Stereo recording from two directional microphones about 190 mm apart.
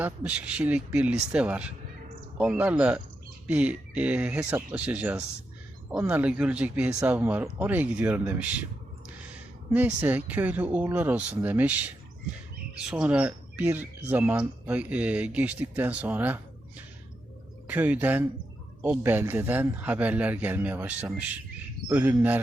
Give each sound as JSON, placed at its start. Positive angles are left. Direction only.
{"t": 0.0, "sound": "speech", "side_deg": -5}
{"t": 9.7, "sound": "speech", "side_deg": -10}